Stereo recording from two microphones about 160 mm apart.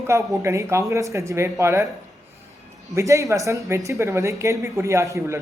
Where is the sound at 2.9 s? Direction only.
20° right (ahead or behind).